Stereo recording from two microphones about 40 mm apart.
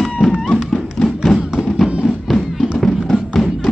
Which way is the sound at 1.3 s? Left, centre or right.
Centre.